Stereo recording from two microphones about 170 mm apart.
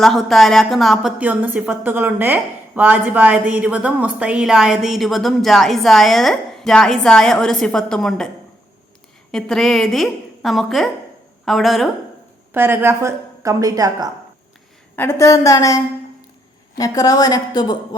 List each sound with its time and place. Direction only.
0.0 s a woman's voice: centre (ahead or behind)
9.3 s a woman's voice: centre (ahead or behind)
12.5 s a woman's voice: 10° right (ahead or behind)
14.9 s a woman's voice: 15° left (ahead or behind)